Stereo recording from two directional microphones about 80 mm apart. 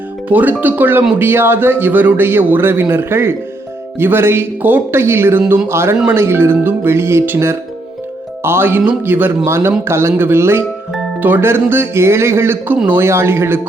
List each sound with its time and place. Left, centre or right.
0.3 s a man's voice: right
12.7 s a man's voice: centre
13.0 s speech: right